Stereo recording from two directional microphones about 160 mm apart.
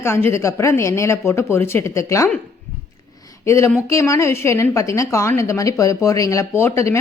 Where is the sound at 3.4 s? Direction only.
15° left (ahead or behind).